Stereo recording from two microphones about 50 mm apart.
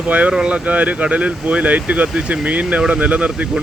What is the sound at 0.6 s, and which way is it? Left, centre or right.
Speech, right.